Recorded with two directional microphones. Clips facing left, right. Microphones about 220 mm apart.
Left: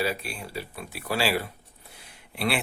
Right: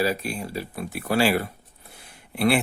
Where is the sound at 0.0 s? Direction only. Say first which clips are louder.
Right 5 dB; 40° right (ahead or behind).